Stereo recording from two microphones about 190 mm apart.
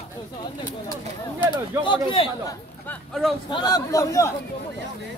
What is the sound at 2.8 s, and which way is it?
Speech, centre (ahead or behind).